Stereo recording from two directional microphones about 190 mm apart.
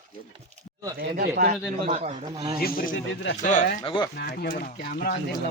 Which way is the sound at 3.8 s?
25° left (ahead or behind).